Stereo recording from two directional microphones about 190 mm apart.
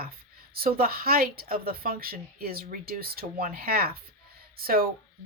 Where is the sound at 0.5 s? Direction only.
50° right (ahead or behind).